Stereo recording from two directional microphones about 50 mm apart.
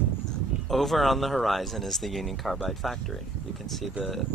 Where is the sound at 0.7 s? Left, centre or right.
Centre.